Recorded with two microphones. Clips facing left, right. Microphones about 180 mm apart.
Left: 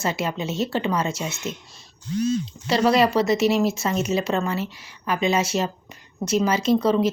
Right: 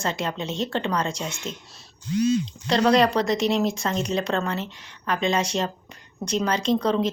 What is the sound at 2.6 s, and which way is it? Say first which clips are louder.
Speech: even; 5° left (ahead or behind).